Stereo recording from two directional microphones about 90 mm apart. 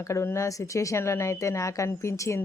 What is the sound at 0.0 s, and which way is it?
Speech, 30° left (ahead or behind).